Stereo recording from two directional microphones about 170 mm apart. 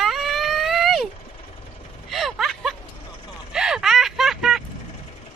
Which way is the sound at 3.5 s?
5° right (ahead or behind).